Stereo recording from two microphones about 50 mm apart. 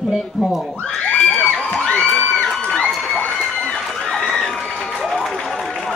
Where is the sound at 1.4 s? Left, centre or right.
Left.